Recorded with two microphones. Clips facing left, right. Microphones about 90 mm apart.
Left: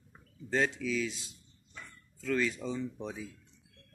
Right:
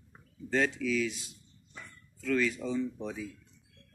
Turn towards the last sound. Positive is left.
turn(degrees=20)  # may be behind; listen again after turning